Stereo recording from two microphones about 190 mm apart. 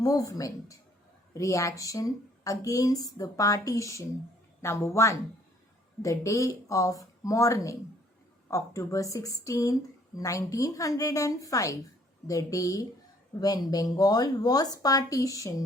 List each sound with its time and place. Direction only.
0.0 s a woman's voice: 20° left (ahead or behind)